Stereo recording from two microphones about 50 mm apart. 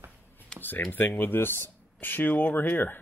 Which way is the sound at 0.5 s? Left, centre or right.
Centre.